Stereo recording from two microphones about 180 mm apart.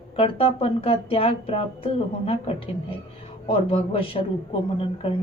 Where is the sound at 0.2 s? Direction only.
35° left (ahead or behind).